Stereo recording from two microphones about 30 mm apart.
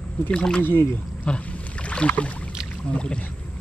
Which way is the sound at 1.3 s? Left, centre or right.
Left.